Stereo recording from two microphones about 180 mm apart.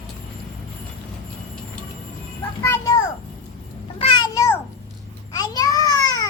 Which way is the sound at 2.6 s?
15° left (ahead or behind).